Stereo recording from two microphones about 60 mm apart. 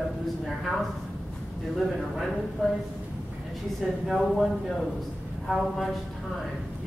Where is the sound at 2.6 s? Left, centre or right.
Centre.